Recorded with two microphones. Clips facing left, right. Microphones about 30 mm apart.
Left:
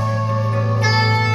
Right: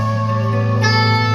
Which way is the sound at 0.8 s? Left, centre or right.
Centre.